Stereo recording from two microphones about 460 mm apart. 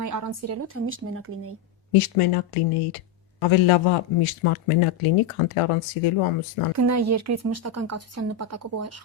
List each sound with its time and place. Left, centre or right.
0.0 s a woman's voice: right
1.9 s a man's voice: left
6.7 s speech: right